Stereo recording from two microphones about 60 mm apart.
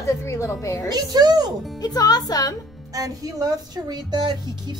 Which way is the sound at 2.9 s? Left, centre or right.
Right.